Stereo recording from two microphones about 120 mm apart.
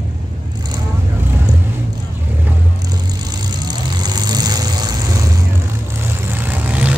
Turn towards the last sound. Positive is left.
turn(degrees=-10)  # may be behind; listen again after turning